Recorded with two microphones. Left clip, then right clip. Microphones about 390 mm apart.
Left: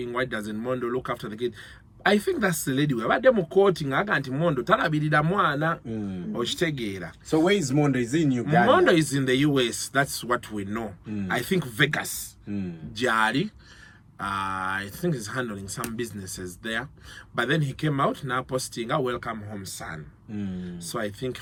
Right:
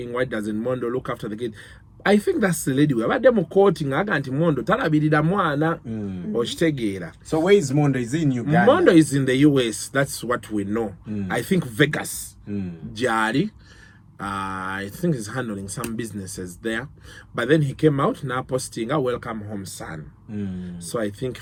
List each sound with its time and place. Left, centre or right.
0.0 s speech: centre
5.9 s speech: centre
6.3 s speech: centre
7.3 s speech: centre
8.7 s speech: centre
12.5 s speech: centre
13.0 s speech: centre
20.3 s speech: centre
20.7 s speech: centre